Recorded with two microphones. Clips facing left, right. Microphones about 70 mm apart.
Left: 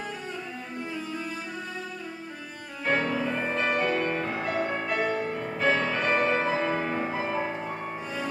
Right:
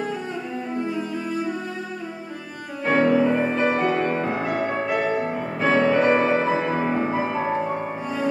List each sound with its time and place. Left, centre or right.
3.0 s music: right
3.3 s music: centre
3.8 s music: right
7.2 s music: centre